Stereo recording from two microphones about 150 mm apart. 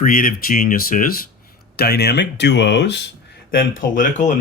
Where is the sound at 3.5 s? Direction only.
70° left (ahead or behind).